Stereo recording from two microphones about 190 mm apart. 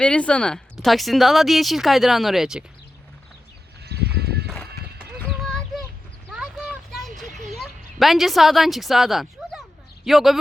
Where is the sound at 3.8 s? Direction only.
60° right (ahead or behind).